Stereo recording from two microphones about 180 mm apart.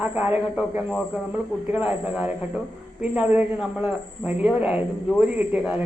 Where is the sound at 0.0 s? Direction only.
10° right (ahead or behind).